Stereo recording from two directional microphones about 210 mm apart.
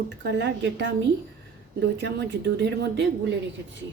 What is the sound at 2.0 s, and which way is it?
Speech, 55° right (ahead or behind).